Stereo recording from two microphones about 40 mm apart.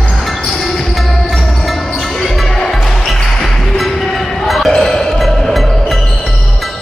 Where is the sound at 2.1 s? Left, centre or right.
Centre.